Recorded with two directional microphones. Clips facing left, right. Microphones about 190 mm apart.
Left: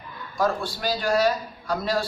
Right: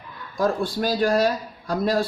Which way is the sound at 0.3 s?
50° right (ahead or behind).